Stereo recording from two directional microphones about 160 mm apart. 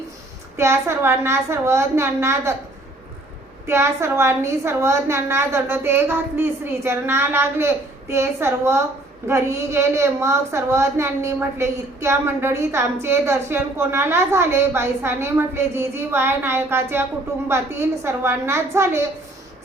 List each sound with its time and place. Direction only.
0.5 s a woman's voice: 15° right (ahead or behind)
3.7 s a woman's voice: 15° right (ahead or behind)